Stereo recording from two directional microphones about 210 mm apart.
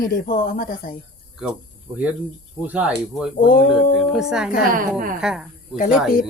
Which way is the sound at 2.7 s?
5° right (ahead or behind).